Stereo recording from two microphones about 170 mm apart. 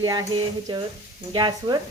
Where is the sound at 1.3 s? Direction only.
25° right (ahead or behind).